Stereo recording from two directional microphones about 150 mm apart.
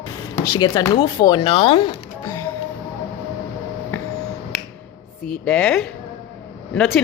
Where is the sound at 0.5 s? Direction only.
25° left (ahead or behind).